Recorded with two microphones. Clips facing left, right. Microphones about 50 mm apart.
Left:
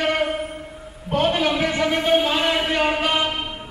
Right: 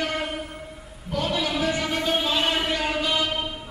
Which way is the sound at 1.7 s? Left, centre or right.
Left.